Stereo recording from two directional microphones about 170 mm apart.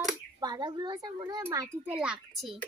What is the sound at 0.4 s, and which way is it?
Speech, 25° right (ahead or behind).